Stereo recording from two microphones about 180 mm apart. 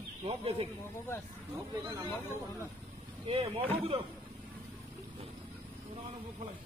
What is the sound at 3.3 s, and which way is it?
Vehicle, 30° right (ahead or behind).